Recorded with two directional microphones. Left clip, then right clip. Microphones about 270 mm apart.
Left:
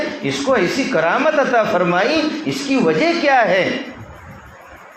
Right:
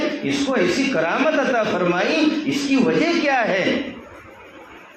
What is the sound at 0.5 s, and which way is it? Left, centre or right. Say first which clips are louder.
A man's voice: left 4 dB; left.